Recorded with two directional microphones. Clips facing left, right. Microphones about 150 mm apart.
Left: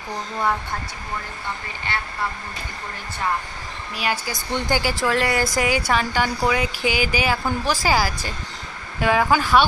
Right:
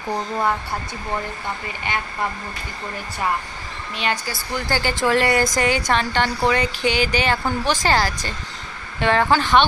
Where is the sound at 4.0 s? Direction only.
5° left (ahead or behind).